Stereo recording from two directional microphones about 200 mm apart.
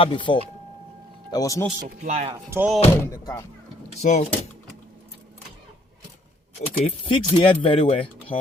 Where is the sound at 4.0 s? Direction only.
35° left (ahead or behind).